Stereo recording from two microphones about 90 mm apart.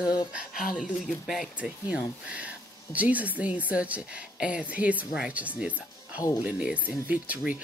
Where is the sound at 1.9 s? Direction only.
15° right (ahead or behind).